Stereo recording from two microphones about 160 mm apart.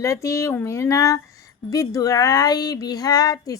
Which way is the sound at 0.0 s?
20° left (ahead or behind).